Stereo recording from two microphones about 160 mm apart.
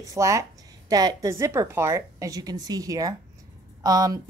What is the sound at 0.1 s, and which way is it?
A woman's voice, 20° right (ahead or behind).